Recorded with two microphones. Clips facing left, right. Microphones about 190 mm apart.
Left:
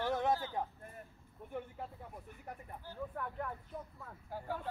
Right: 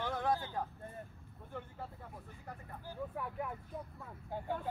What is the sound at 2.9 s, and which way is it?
Speech, 10° right (ahead or behind).